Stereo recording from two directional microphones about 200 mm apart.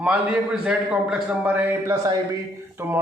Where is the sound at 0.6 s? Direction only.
5° right (ahead or behind).